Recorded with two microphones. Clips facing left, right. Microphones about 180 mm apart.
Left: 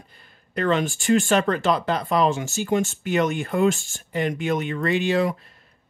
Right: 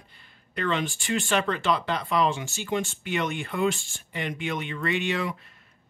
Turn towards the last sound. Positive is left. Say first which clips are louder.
# left 7 dB
turn(degrees=35)  # may be behind; listen again after turning